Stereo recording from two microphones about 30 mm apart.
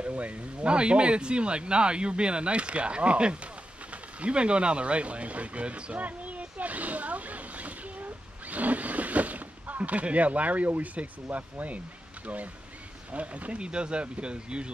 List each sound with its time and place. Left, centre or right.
0.0 s speech: right
0.7 s speech: right
5.9 s a sound: right
8.5 s speech: right
13.1 s speech: right